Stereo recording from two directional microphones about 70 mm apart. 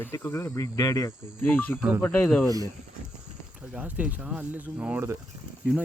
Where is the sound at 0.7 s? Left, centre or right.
Left.